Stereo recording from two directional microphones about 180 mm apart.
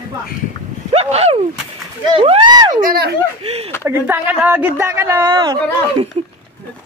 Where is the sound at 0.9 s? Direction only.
35° right (ahead or behind).